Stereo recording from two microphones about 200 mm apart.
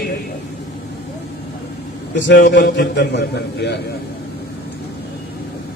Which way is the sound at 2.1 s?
65° left (ahead or behind).